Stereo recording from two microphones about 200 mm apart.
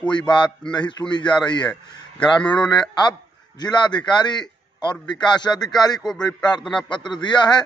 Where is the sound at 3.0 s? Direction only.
20° left (ahead or behind).